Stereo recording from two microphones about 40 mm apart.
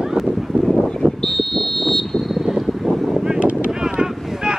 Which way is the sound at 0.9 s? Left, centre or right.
Centre.